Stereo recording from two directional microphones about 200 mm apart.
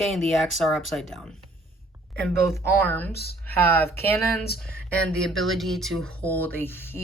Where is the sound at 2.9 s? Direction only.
10° left (ahead or behind).